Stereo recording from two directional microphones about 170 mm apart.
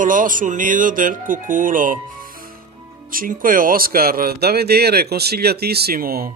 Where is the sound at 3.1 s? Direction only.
55° right (ahead or behind).